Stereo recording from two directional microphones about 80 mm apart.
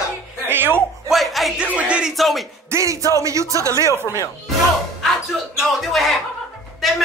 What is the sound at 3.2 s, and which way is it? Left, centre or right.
Speech, right.